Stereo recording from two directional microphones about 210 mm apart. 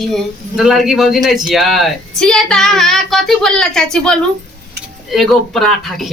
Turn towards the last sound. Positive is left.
turn(degrees=0)  # may be behind; listen again after turning